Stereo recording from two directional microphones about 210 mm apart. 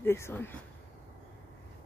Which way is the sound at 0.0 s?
10° left (ahead or behind).